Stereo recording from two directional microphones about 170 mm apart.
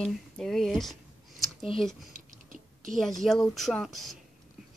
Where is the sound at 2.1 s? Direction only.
50° right (ahead or behind).